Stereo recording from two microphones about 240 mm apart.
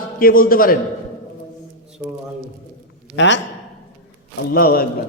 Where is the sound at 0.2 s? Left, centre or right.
Left.